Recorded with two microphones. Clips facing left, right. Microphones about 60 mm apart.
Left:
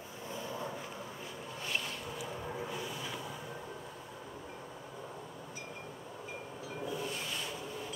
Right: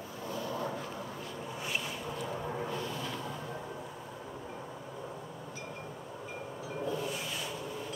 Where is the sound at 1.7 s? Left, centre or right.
Centre.